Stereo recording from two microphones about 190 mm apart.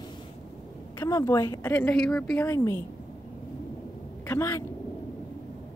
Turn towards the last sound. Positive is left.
turn(degrees=15)  # may be behind; listen again after turning